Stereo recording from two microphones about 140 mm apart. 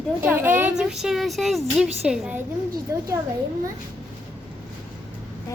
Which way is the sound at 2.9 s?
20° right (ahead or behind).